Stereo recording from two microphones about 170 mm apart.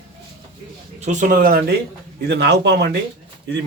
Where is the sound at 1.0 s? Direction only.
45° right (ahead or behind); by 1.7 s 60° right (ahead or behind).